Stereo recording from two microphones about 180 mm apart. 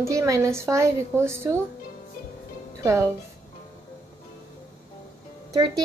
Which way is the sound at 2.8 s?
15° right (ahead or behind).